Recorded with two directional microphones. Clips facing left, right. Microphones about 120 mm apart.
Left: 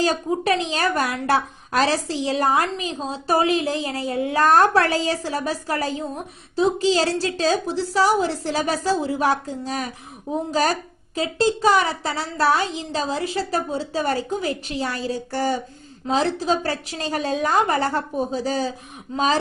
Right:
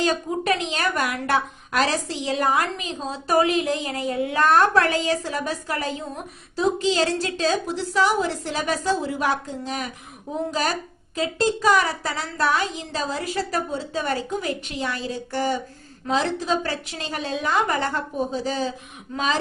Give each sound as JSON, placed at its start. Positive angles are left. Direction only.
{"t": 0.0, "sound": "a woman's voice", "side_deg": 35}